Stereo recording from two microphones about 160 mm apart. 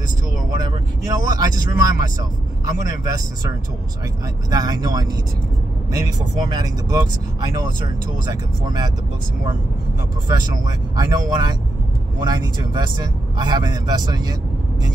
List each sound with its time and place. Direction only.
1.3 s speech: 25° right (ahead or behind)
4.5 s speech: 25° right (ahead or behind)
8.1 s speech: 25° right (ahead or behind)
10.2 s speech: 20° right (ahead or behind)